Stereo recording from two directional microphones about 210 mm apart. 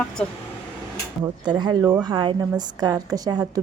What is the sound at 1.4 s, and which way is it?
A woman's voice, 20° right (ahead or behind).